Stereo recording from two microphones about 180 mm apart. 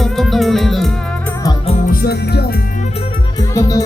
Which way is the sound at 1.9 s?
60° left (ahead or behind).